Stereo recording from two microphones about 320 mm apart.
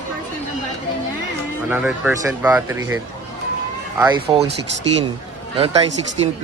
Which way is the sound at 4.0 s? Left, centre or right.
Centre.